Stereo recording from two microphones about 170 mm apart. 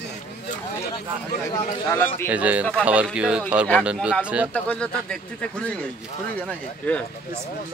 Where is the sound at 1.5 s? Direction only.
15° left (ahead or behind).